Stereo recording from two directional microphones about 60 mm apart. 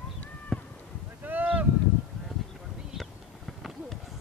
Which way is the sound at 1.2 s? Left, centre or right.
Right.